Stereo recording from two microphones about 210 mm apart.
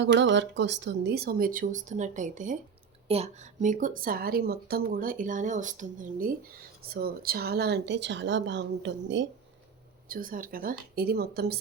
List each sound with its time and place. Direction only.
0.0 s speech: 60° right (ahead or behind)
10.1 s speech: 40° right (ahead or behind)